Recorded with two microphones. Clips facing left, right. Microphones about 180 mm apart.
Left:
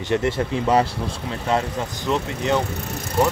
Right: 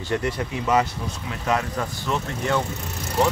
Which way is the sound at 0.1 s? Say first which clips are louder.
Left 4 dB; 25° left (ahead or behind).